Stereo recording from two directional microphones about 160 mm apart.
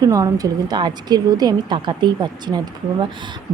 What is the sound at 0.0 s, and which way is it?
Speech, 20° right (ahead or behind).